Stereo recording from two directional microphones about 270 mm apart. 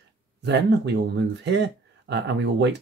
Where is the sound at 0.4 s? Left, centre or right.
Right.